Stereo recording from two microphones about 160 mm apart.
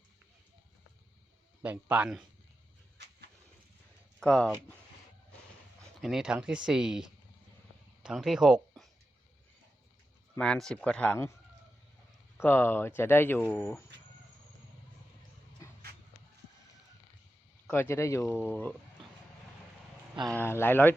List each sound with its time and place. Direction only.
1.6 s speech: 10° right (ahead or behind)
4.2 s speech: 5° left (ahead or behind)
6.0 s speech: centre (ahead or behind)
10.3 s speech: 5° left (ahead or behind)
12.4 s speech: 15° left (ahead or behind)
15.6 s a sound: 20° left (ahead or behind)
17.7 s speech: 15° left (ahead or behind)
20.1 s speech: 25° right (ahead or behind)
20.4 s speech: 15° left (ahead or behind)